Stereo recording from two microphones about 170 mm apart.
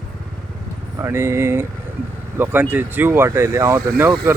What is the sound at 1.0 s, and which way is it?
Speech, 15° right (ahead or behind).